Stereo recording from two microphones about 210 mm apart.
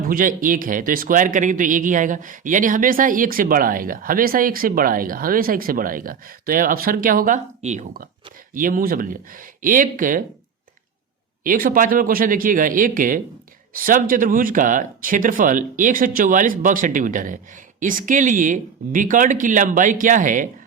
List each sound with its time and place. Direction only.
0.1 s speech: 40° right (ahead or behind)
11.4 s speech: 45° right (ahead or behind)